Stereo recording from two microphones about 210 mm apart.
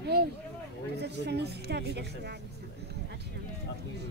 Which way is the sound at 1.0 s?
50° right (ahead or behind).